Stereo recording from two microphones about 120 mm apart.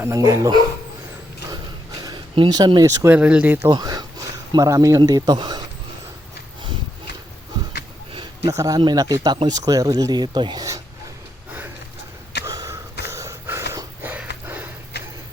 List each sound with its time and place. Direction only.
0.0 s speech: 25° right (ahead or behind)
2.0 s a sound: 30° right (ahead or behind)
2.3 s speech: 40° right (ahead or behind)
3.1 s speech: 10° right (ahead or behind)
3.7 s speech: 35° right (ahead or behind)
8.1 s a sound: 40° right (ahead or behind)
8.5 s speech: 30° right (ahead or behind)
12.5 s wheeze: 25° right (ahead or behind)